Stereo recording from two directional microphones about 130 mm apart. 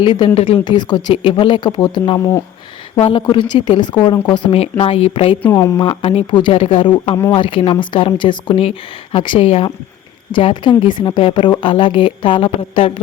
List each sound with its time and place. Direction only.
0.0 s speech: 35° left (ahead or behind)
0.3 s speech: 50° left (ahead or behind)
0.6 s speech: 35° left (ahead or behind)
3.0 s speech: 45° left (ahead or behind)
4.8 s speech: 50° left (ahead or behind)
5.4 s speech: 20° left (ahead or behind)
5.8 s speech: 45° left (ahead or behind)